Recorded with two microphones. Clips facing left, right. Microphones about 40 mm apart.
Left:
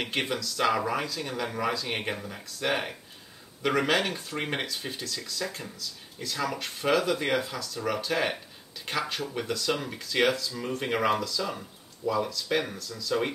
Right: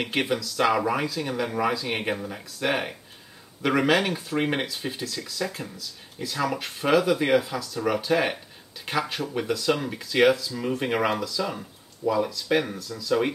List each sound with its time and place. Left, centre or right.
0.0 s speech: centre